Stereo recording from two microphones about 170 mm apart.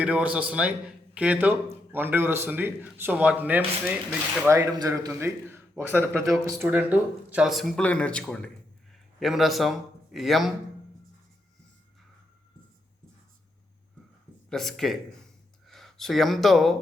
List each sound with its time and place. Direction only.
0.0 s a man's voice: 5° right (ahead or behind)
14.5 s speech: centre (ahead or behind)